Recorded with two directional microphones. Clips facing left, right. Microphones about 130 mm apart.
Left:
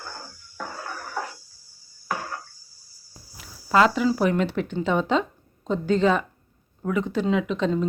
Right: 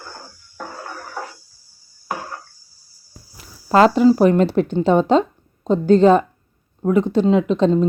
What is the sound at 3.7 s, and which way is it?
A woman's voice, 35° right (ahead or behind).